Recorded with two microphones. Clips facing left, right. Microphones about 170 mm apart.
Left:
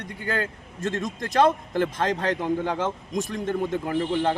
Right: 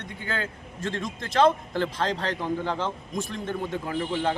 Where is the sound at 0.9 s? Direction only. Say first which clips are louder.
Left 3 dB; 45° left (ahead or behind).